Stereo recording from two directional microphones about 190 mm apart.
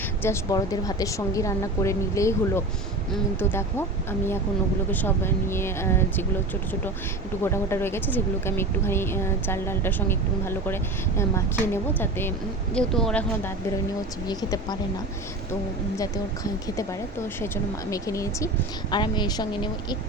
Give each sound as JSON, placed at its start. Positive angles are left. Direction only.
{"t": 0.2, "sound": "speech", "side_deg": 15}
{"t": 4.9, "sound": "speech", "side_deg": 10}
{"t": 7.4, "sound": "speech", "side_deg": 15}
{"t": 14.3, "sound": "a woman's voice", "side_deg": 20}
{"t": 16.0, "sound": "a woman's voice", "side_deg": 20}